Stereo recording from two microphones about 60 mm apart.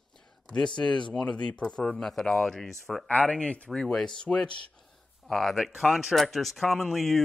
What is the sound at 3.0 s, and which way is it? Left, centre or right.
Speech, left.